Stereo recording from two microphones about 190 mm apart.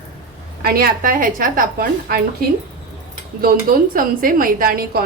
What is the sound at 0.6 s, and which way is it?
Speech, 50° right (ahead or behind).